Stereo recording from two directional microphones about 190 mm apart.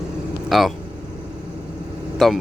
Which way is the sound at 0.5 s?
Centre (ahead or behind).